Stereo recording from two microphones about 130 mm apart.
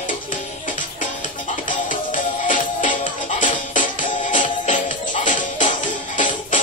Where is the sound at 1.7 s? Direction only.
90° left.